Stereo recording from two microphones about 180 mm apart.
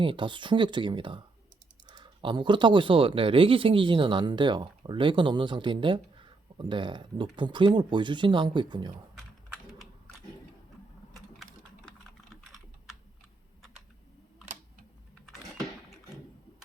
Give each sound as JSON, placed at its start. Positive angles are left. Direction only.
{"t": 0.0, "sound": "speech", "side_deg": -25}